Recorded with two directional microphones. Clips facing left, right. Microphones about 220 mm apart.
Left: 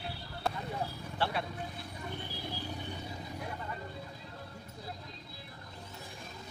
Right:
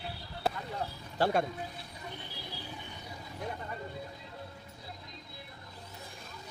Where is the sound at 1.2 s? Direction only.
45° right (ahead or behind).